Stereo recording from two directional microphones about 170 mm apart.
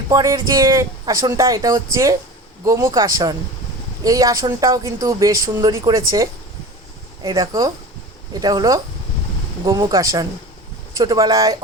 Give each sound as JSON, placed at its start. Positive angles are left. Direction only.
{"t": 0.1, "sound": "speech", "side_deg": -20}